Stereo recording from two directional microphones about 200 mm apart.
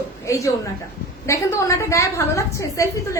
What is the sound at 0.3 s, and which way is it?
A woman's voice, 15° left (ahead or behind).